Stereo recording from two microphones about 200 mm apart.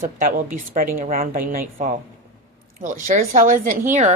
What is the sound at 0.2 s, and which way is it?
A woman's voice, 45° right (ahead or behind).